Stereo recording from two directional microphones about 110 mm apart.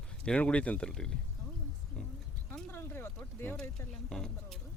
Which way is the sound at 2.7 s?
20° left (ahead or behind).